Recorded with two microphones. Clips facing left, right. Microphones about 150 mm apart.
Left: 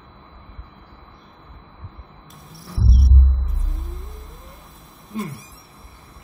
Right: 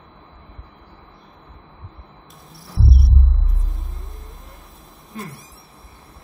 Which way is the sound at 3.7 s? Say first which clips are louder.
Left 3 dB; centre (ahead or behind).